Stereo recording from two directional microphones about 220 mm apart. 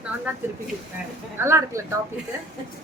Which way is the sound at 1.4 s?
10° right (ahead or behind).